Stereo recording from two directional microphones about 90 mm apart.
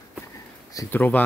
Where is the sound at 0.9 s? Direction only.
20° left (ahead or behind).